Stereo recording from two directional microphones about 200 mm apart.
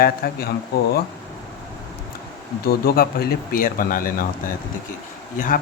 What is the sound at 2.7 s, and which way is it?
Speech, 50° left (ahead or behind).